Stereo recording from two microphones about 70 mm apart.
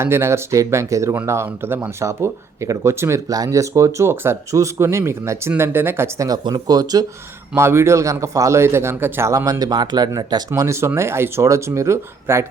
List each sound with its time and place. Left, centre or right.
0.0 s speech: right
1.6 s a man's voice: right
2.0 s a man's voice: right
3.2 s a man's voice: right
6.1 s speech: right
7.5 s a man's voice: right
9.3 s speech: right
9.6 s speech: right
10.5 s speech: right